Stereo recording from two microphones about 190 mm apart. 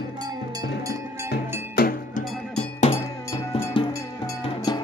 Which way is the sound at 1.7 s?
50° left (ahead or behind).